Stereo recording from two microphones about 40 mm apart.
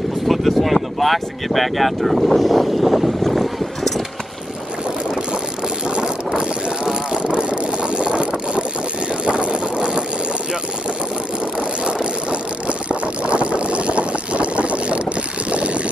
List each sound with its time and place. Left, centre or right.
0.3 s speech: centre
5.9 s vehicle: right
11.8 s vehicle: right
15.5 s a sound: right